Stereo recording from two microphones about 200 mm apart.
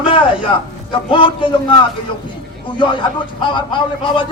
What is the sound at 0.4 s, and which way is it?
Speech, 25° left (ahead or behind).